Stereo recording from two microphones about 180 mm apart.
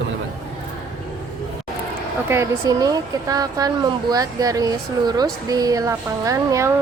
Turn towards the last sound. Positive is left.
turn(degrees=-20)  # may be behind; listen again after turning